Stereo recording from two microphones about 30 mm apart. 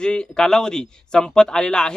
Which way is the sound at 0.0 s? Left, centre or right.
Left.